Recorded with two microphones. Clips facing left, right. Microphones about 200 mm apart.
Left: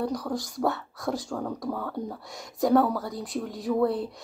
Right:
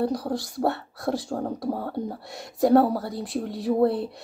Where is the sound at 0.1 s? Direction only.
30° right (ahead or behind).